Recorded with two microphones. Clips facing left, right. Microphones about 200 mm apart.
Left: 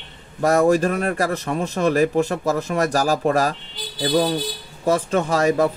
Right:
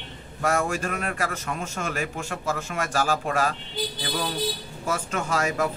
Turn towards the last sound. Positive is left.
turn(degrees=35)  # may be behind; listen again after turning